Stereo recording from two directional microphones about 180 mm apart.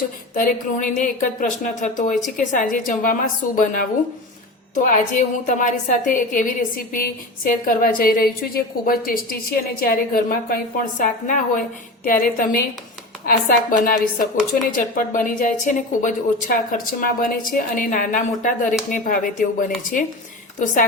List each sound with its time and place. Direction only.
0.3 s speech: 45° left (ahead or behind)